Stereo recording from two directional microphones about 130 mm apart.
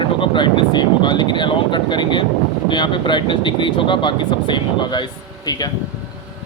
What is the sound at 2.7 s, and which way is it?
Speech, 35° left (ahead or behind).